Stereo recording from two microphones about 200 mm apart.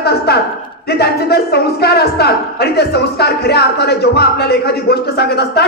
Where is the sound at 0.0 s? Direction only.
55° left (ahead or behind).